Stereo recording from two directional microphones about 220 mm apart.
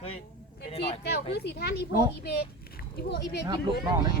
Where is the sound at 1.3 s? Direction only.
50° left (ahead or behind).